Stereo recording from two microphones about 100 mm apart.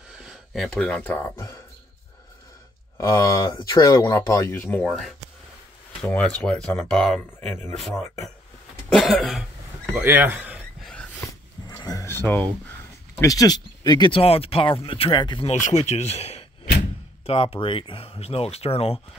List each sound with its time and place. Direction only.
0.1 s speech: 5° right (ahead or behind); by 1.4 s 20° left (ahead or behind)
3.0 s speech: 30° left (ahead or behind)
4.6 s speech: 10° left (ahead or behind)
8.9 s cough: centre (ahead or behind)
9.9 s speech: 20° right (ahead or behind)
11.6 s a sound: 40° left (ahead or behind)
12.1 s speech: 20° left (ahead or behind)
13.2 s speech: 35° left (ahead or behind)
14.2 s speech: 75° left (ahead or behind); by 15.4 s 50° left (ahead or behind)
15.4 s speech: 90° left
17.3 s speech: 70° left (ahead or behind)